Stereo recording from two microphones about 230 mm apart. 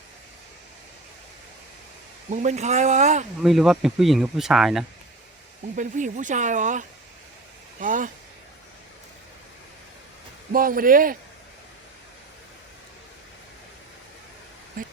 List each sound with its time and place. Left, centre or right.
2.3 s speech: right
3.4 s speech: centre
5.7 s speech: right
10.5 s speech: right
14.8 s a sound: right